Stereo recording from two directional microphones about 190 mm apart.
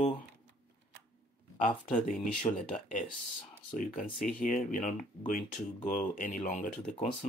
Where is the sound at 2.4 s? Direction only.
40° left (ahead or behind).